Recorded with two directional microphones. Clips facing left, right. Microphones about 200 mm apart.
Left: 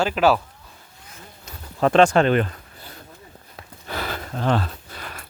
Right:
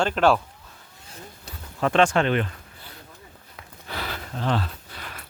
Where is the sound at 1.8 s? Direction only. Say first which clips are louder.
Left 4 dB; 40° left (ahead or behind).